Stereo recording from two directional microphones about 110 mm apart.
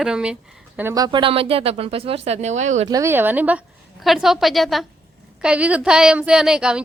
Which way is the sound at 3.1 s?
15° right (ahead or behind).